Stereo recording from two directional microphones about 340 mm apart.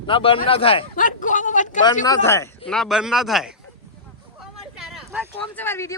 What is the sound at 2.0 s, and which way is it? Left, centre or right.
A man's voice, centre.